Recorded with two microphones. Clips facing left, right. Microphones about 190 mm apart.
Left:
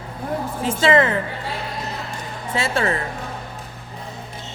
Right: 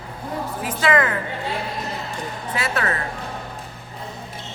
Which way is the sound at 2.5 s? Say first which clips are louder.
Left 3 dB; 25° left (ahead or behind).